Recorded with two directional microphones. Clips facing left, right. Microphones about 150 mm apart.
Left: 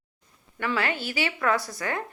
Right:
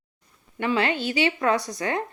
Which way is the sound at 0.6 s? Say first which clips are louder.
Right 4 dB; 20° right (ahead or behind).